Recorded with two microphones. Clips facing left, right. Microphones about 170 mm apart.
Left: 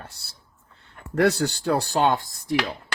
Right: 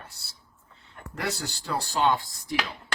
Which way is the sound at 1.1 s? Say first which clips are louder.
Left 12 dB; 65° left (ahead or behind).